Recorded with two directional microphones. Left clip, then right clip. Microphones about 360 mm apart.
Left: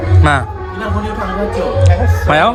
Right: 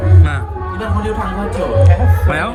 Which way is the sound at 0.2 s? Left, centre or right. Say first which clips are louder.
Left 10 dB; centre.